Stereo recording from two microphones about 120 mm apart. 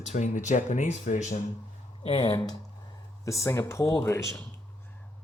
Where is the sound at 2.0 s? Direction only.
50° left (ahead or behind).